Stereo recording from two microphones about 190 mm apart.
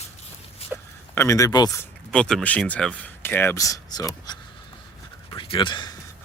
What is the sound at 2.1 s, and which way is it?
Speech, 5° left (ahead or behind).